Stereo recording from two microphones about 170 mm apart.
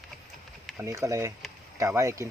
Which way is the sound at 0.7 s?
15° right (ahead or behind).